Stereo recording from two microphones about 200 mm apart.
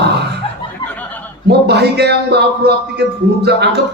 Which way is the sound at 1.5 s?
55° right (ahead or behind).